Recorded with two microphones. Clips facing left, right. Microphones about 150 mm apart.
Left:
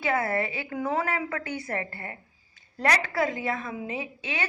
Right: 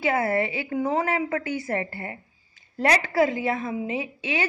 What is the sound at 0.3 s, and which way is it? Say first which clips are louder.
Speech: right 4 dB; 45° left (ahead or behind).